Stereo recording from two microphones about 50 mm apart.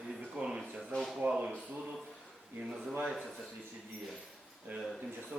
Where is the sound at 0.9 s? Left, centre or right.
Centre.